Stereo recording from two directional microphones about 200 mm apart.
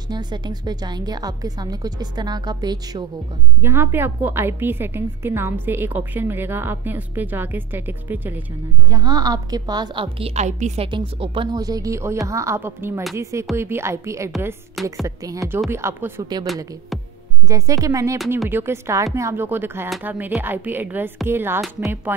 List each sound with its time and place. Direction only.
0.1 s a woman's voice: 20° right (ahead or behind)
17.5 s a woman's voice: 15° right (ahead or behind)